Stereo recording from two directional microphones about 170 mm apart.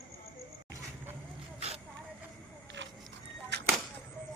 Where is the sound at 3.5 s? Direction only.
80° right.